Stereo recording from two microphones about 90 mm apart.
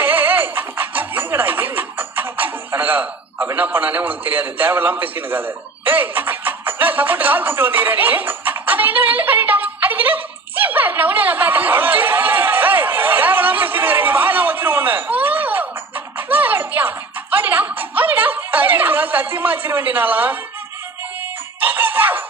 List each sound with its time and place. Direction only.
0.0 s speech: 20° right (ahead or behind)
16.1 s music: 20° right (ahead or behind)
21.6 s music: 20° right (ahead or behind)